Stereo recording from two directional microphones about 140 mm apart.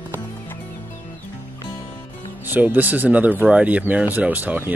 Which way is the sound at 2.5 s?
15° right (ahead or behind).